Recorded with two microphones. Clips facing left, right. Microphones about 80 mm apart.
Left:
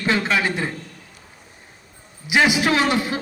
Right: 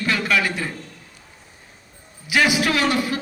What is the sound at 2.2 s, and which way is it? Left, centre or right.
Speech, left.